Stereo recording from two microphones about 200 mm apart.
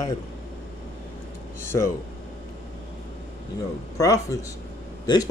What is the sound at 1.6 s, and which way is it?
Speech, 10° left (ahead or behind).